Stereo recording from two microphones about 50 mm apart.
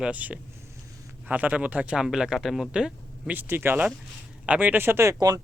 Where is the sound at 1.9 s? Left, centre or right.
Centre.